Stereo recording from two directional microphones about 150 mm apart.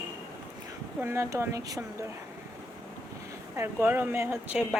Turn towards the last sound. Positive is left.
turn(degrees=-10)  # may be behind; listen again after turning